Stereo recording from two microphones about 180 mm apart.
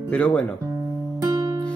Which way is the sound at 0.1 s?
5° left (ahead or behind).